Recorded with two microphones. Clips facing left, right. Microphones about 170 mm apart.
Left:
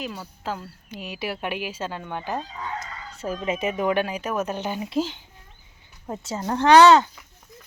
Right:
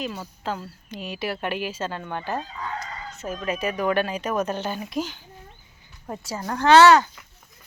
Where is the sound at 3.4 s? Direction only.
20° left (ahead or behind).